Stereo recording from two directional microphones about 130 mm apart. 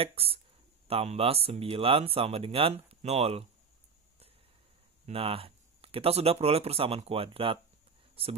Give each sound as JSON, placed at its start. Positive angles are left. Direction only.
{"t": 0.0, "sound": "speech", "side_deg": -45}
{"t": 5.0, "sound": "speech", "side_deg": -45}